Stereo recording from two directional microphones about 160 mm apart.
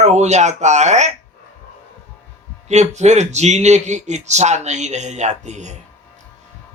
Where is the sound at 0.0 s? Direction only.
45° right (ahead or behind).